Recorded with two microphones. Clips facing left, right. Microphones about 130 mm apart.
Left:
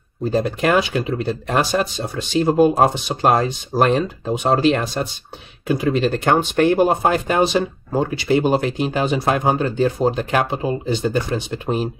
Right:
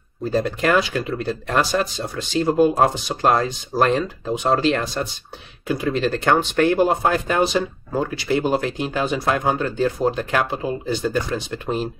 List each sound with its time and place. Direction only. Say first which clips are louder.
0.3 s speech: left 1 dB; 20° left (ahead or behind)